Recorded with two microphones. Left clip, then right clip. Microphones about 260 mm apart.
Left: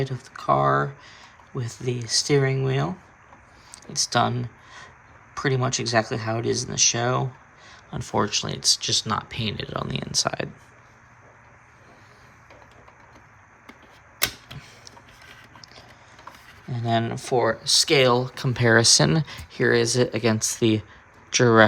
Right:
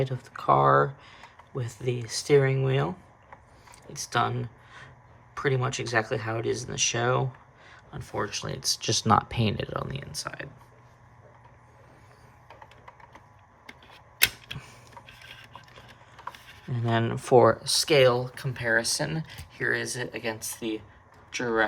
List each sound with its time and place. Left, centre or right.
0.0 s speech: centre
3.9 s speech: centre
16.6 s speech: centre; by 21.7 s left